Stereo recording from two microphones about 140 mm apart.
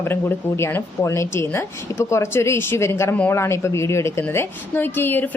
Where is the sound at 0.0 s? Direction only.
15° left (ahead or behind).